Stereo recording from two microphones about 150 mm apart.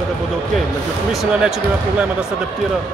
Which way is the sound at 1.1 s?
Centre (ahead or behind).